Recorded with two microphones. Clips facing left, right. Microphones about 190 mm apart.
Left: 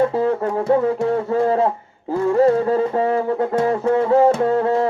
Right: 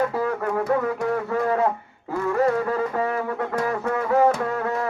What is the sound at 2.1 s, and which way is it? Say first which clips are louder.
Music: left 6 dB; 30° left (ahead or behind).